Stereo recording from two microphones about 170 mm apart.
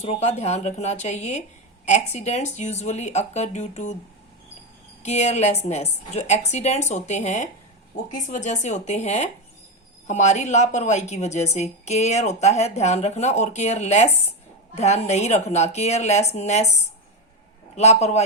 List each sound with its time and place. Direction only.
0.0 s a woman's voice: 40° left (ahead or behind)
5.0 s a woman's voice: 40° left (ahead or behind)